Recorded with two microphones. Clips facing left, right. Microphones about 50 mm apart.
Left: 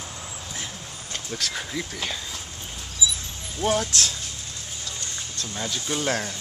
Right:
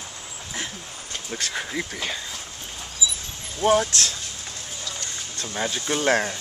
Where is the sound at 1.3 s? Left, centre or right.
Centre.